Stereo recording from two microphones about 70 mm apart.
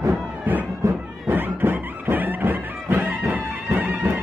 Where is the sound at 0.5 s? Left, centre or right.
Right.